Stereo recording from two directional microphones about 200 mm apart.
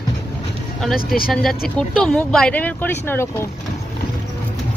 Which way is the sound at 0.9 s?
45° left (ahead or behind).